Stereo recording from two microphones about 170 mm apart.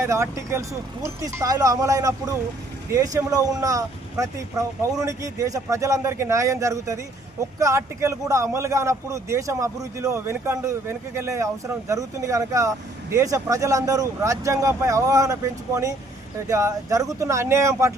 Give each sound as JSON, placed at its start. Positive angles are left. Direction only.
{"t": 0.0, "sound": "a man's voice", "side_deg": -15}